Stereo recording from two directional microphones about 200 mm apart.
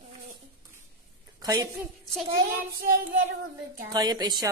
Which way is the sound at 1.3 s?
20° right (ahead or behind).